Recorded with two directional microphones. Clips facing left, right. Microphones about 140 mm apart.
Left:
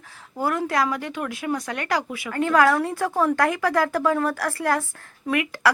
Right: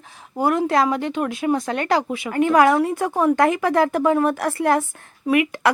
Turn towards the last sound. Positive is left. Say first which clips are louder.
# right 4 dB
turn(degrees=-20)  # may be behind; listen again after turning